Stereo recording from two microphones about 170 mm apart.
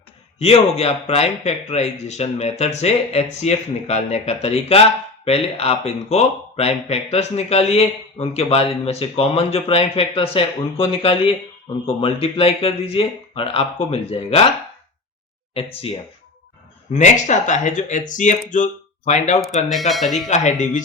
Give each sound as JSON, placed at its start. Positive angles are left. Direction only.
{"t": 0.3, "sound": "speech", "side_deg": 35}
{"t": 15.5, "sound": "speech", "side_deg": 35}
{"t": 16.9, "sound": "speech", "side_deg": 45}
{"t": 19.9, "sound": "speech", "side_deg": 0}
{"t": 20.2, "sound": "speech", "side_deg": 45}